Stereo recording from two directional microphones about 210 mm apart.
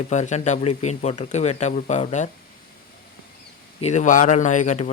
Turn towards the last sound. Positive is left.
turn(degrees=35)  # may be behind; listen again after turning